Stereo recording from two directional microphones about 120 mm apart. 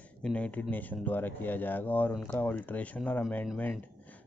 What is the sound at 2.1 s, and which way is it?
Speech, centre (ahead or behind).